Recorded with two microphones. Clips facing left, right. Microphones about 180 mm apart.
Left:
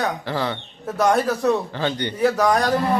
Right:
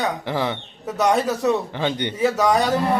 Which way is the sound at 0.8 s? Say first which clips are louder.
Left 1 dB; centre (ahead or behind).